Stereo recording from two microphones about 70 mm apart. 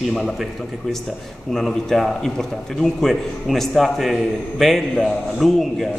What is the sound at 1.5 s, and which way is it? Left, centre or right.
A man's voice, centre.